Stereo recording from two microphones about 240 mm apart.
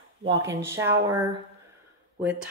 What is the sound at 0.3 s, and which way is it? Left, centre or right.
Speech, centre.